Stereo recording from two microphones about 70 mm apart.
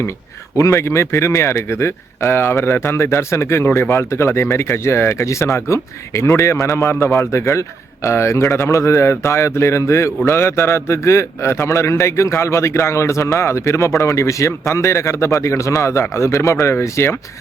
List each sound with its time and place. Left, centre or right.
0.5 s a man's voice: left